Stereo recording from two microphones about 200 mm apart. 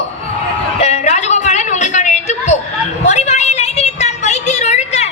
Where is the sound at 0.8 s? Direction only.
35° left (ahead or behind).